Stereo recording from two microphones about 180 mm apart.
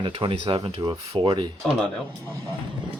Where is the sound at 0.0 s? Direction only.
25° right (ahead or behind).